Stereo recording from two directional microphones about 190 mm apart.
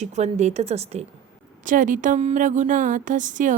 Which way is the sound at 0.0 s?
35° right (ahead or behind).